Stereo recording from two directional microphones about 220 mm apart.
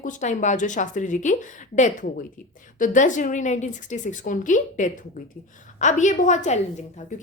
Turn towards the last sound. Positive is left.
turn(degrees=30)  # may be behind; listen again after turning